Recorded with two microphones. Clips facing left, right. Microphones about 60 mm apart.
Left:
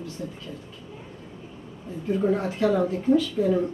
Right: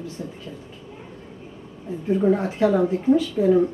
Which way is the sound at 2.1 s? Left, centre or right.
Centre.